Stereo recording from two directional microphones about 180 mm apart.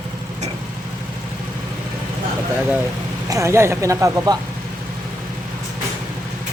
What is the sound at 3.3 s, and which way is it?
Speech, 15° right (ahead or behind).